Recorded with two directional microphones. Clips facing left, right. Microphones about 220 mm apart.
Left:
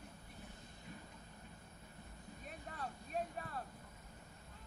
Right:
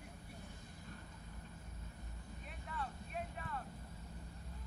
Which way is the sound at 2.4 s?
40° left (ahead or behind).